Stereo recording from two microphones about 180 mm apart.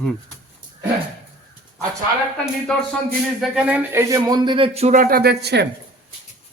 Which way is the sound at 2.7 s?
5° left (ahead or behind).